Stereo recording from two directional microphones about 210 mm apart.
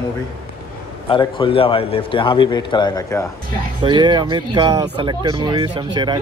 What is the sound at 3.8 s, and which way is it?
Speech, 20° right (ahead or behind).